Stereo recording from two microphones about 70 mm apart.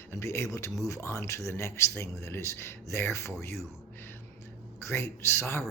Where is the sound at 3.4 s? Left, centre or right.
Left.